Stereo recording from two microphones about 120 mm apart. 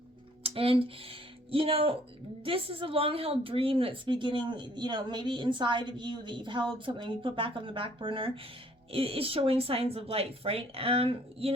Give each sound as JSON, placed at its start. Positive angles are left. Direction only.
{"t": 0.4, "sound": "a woman's voice", "side_deg": -50}